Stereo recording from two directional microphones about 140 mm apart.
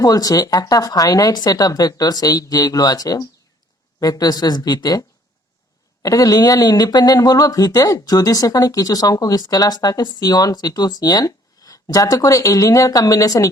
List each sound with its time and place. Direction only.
0.0 s speech: 25° left (ahead or behind)